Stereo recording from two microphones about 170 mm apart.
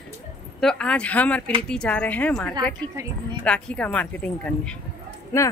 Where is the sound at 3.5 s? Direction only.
5° left (ahead or behind).